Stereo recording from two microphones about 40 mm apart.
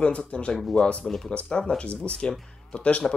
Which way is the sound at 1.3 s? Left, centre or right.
Left.